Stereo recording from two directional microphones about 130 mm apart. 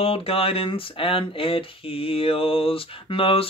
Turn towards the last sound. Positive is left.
turn(degrees=45)  # may be behind; listen again after turning